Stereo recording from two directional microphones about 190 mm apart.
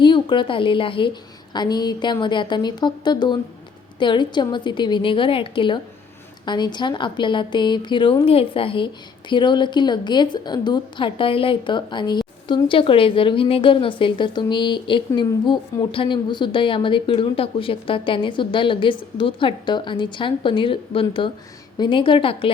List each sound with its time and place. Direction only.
0.0 s a woman's voice: 25° left (ahead or behind)